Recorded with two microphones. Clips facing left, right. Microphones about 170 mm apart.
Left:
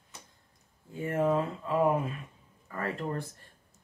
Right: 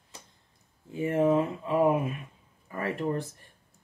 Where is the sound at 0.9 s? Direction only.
20° right (ahead or behind).